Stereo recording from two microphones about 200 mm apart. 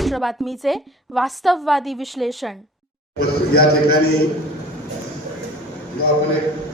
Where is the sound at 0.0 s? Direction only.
Centre (ahead or behind).